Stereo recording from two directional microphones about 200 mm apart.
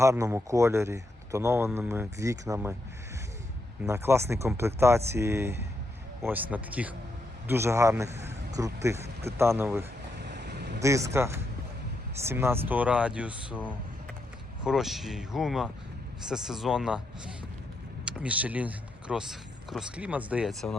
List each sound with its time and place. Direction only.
0.0 s speech: 15° right (ahead or behind)
3.8 s a man's voice: 15° right (ahead or behind)
10.2 s vehicle: 55° right (ahead or behind)
10.8 s speech: 15° right (ahead or behind); by 20.7 s centre (ahead or behind)